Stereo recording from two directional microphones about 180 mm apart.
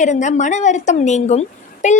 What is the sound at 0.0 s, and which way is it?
A woman's voice, 40° left (ahead or behind).